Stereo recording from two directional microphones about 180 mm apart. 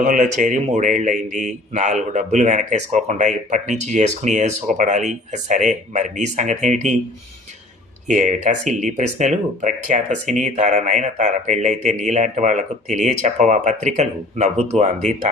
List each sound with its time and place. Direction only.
0.0 s a man's voice: 45° right (ahead or behind)
8.0 s speech: 45° right (ahead or behind)